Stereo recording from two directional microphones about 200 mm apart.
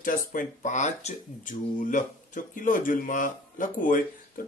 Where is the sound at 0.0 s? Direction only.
40° left (ahead or behind).